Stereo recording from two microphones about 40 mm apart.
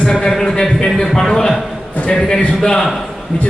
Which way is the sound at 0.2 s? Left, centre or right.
Centre.